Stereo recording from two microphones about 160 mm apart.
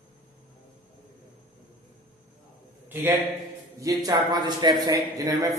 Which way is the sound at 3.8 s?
20° right (ahead or behind).